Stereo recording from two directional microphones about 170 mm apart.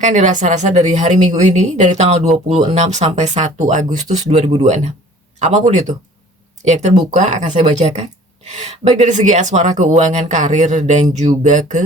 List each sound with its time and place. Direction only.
0.0 s speech: 45° right (ahead or behind)